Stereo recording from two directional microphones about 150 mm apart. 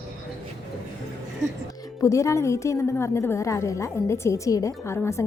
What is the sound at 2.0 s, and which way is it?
A woman's voice, 20° left (ahead or behind).